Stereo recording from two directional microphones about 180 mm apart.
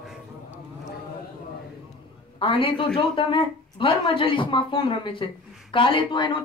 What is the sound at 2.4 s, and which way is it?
A man's voice, 30° left (ahead or behind).